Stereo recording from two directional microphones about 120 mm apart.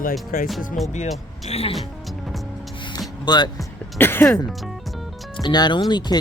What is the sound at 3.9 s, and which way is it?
Speech, 20° left (ahead or behind).